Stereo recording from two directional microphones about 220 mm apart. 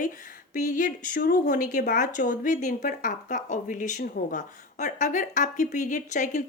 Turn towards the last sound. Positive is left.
turn(degrees=35)  # may be behind; listen again after turning